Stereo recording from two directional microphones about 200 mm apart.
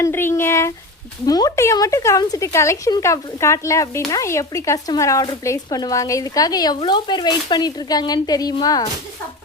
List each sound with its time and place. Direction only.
0.0 s speech: 10° left (ahead or behind)